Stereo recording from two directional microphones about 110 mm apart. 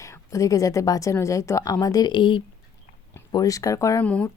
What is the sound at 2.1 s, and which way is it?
Speech, 50° left (ahead or behind).